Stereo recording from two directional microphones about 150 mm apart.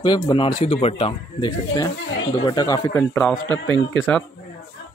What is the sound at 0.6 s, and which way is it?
Speech, 40° left (ahead or behind).